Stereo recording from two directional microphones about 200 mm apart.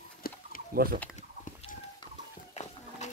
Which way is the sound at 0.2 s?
45° left (ahead or behind).